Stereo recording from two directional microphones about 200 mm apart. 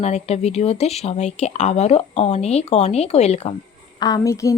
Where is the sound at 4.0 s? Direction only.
20° left (ahead or behind).